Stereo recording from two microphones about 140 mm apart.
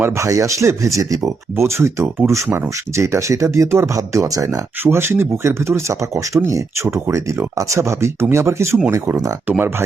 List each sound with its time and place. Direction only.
0.0 s speech: 20° right (ahead or behind)